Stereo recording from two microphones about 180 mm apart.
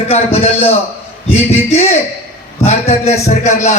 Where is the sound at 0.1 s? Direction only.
35° left (ahead or behind).